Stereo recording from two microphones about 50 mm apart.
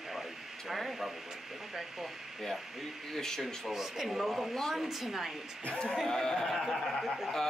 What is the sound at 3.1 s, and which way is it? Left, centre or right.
Speech, centre.